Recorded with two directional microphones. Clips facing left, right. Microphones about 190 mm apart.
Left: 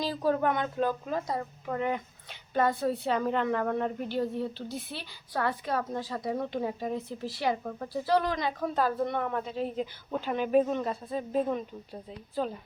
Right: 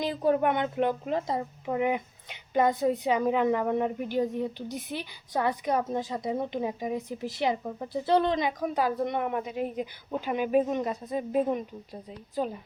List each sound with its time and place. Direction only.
0.0 s speech: 20° right (ahead or behind)